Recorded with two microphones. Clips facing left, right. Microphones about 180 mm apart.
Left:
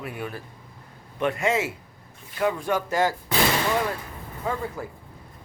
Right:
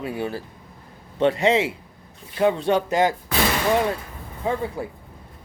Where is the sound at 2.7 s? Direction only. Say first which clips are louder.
Right 4 dB; 20° right (ahead or behind).